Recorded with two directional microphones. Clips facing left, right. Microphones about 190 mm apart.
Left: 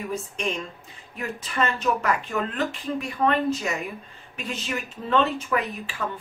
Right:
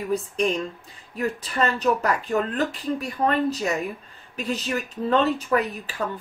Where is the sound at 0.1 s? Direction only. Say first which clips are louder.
Right 9 dB; 35° right (ahead or behind).